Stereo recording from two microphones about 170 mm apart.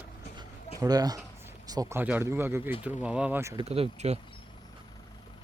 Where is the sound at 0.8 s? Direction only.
20° right (ahead or behind).